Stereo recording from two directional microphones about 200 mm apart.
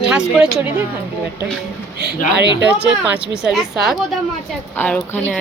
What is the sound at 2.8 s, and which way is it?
A woman's voice, centre (ahead or behind).